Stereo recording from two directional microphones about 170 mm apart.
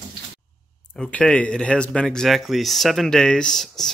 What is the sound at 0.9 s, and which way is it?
Speech, 5° left (ahead or behind).